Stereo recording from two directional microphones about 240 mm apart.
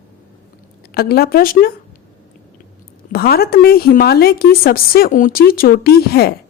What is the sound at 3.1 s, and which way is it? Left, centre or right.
A woman's voice, left.